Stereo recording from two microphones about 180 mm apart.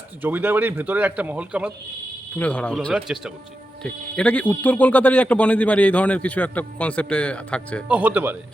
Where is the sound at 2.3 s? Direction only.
5° left (ahead or behind).